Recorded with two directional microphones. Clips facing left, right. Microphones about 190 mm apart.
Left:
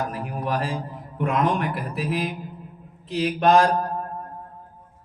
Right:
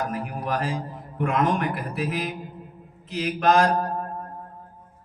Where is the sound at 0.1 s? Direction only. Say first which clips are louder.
Left 1 dB; 35° left (ahead or behind).